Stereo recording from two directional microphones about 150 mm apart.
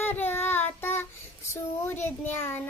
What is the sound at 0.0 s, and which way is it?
Child singing, 15° left (ahead or behind).